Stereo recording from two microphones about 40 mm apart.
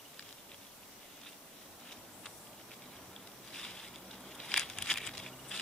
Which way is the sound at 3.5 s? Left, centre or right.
Centre.